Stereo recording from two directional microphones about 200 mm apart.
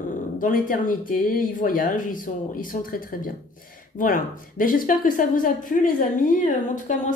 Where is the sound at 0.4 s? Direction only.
40° left (ahead or behind).